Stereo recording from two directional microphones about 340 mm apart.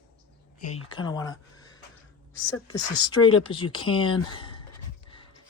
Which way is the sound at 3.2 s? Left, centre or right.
Left.